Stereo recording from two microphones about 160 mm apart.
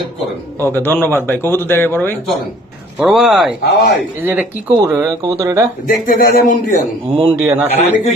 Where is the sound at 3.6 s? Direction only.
80° left.